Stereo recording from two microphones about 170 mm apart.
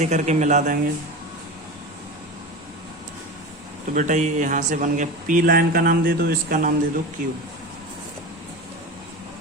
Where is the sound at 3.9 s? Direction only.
45° right (ahead or behind).